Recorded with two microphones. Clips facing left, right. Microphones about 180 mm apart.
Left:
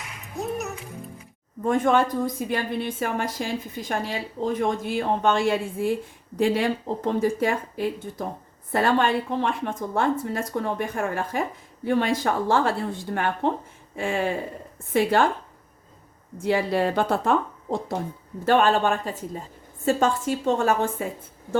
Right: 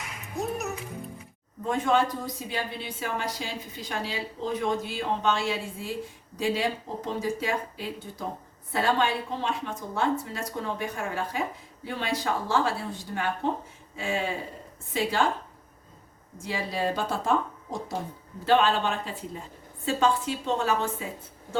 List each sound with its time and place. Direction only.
0.3 s music: centre (ahead or behind)
1.6 s a woman's voice: 50° left (ahead or behind)
16.4 s speech: 60° left (ahead or behind)
18.4 s a woman's voice: 50° left (ahead or behind)